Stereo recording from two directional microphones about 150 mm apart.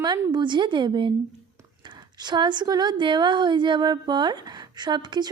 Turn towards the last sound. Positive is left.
turn(degrees=-30)  # may be behind; listen again after turning